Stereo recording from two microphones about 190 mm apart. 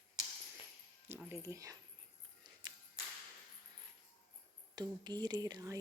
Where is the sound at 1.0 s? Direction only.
10° right (ahead or behind).